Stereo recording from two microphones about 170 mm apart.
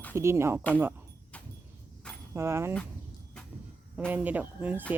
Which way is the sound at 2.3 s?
15° right (ahead or behind).